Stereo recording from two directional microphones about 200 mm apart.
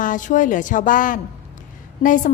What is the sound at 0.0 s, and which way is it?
A woman's voice, 40° left (ahead or behind).